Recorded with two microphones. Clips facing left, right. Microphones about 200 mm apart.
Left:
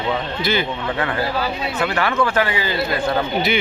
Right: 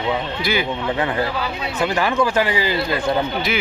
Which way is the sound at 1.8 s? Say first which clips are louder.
Right 2 dB; 15° right (ahead or behind).